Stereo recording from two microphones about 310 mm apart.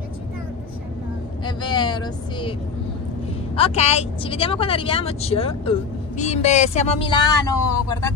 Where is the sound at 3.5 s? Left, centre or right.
Centre.